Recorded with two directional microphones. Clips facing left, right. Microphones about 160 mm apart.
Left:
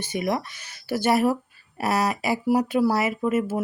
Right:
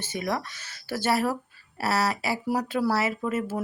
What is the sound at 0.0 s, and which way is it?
Speech, 15° left (ahead or behind).